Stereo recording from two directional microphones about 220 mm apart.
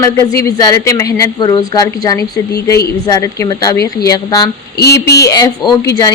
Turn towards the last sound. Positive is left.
turn(degrees=15)  # may be behind; listen again after turning